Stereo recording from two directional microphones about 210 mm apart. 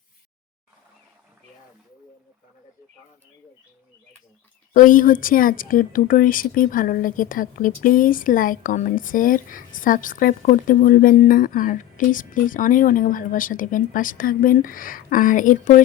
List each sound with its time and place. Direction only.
4.7 s speech: 40° left (ahead or behind)